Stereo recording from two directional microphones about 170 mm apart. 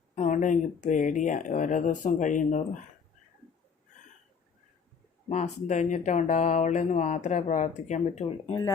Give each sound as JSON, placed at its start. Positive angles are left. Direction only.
{"t": 0.2, "sound": "speech", "side_deg": 50}
{"t": 5.3, "sound": "speech", "side_deg": 45}